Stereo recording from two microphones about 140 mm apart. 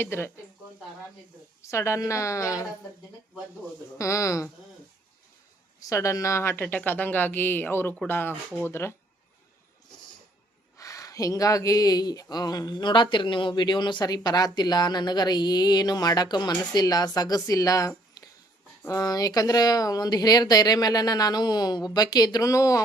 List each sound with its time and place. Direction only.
0.0 s speech: 15° left (ahead or behind)
1.6 s speech: 20° left (ahead or behind)
3.9 s speech: 20° left (ahead or behind)
5.8 s speech: 20° left (ahead or behind)
10.8 s speech: 25° left (ahead or behind)